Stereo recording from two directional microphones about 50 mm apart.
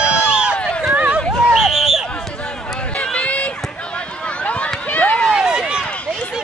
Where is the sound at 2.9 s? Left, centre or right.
Left.